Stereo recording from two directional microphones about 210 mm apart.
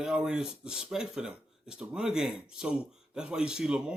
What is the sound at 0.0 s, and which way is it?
Speech, 5° right (ahead or behind).